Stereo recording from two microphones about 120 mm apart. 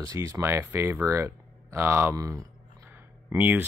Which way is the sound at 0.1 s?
25° right (ahead or behind).